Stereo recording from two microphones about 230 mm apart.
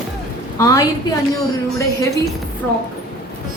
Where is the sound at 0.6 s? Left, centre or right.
Centre.